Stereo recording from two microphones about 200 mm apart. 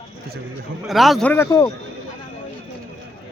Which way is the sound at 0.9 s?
Centre (ahead or behind).